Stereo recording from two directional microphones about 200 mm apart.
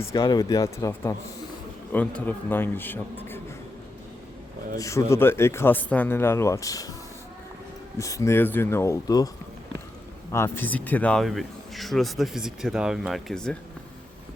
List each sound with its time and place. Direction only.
0.1 s speech: 20° left (ahead or behind)
4.8 s speech: 15° left (ahead or behind)
7.9 s speech: 15° left (ahead or behind)
10.3 s speech: 10° left (ahead or behind)